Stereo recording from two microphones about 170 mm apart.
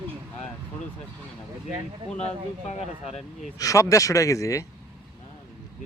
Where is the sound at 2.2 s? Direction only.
40° left (ahead or behind).